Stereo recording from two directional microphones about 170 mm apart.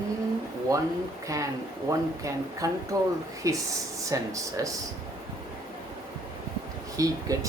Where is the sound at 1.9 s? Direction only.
20° right (ahead or behind).